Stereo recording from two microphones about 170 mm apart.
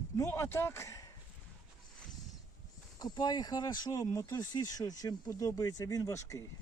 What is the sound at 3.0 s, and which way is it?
Speech, 25° left (ahead or behind).